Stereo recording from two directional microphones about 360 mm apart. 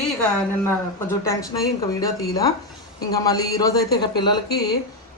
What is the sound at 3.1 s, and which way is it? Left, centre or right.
A woman's voice, centre.